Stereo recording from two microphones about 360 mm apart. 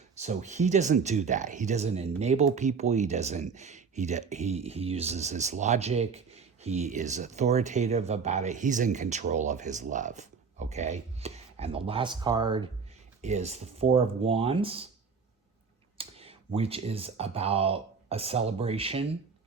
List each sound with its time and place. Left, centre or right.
0.2 s speech: centre
16.0 s speech: centre